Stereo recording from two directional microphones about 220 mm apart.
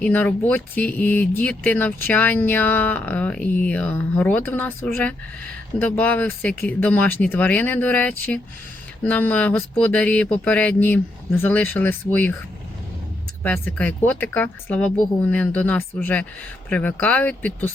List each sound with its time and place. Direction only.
0.0 s speech: 5° left (ahead or behind)
13.4 s speech: 10° left (ahead or behind)